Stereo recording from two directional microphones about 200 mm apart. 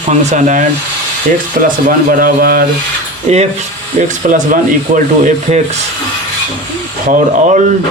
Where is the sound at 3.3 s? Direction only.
35° right (ahead or behind).